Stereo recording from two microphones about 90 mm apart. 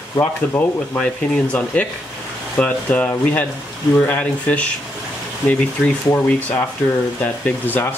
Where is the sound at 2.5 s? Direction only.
15° left (ahead or behind).